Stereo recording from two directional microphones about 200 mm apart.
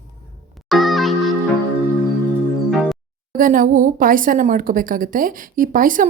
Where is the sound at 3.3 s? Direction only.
45° right (ahead or behind).